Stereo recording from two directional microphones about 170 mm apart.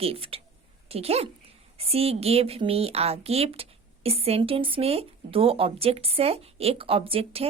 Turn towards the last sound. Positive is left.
turn(degrees=-35)  # may be behind; listen again after turning